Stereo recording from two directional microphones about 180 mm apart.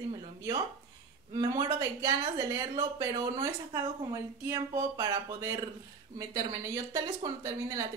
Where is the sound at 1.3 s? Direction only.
20° right (ahead or behind).